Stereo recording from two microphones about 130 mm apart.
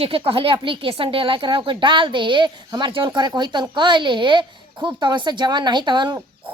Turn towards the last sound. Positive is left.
turn(degrees=-35)  # may be behind; listen again after turning